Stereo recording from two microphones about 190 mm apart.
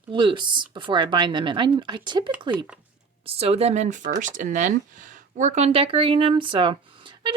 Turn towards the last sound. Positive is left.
turn(degrees=-25)  # may be behind; listen again after turning